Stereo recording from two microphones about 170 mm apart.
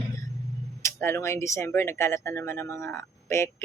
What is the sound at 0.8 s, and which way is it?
Speech, 15° left (ahead or behind).